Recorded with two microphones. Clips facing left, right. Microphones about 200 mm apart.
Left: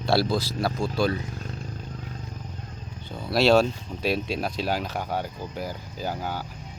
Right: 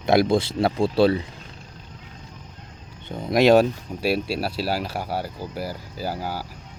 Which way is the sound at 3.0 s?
20° right (ahead or behind).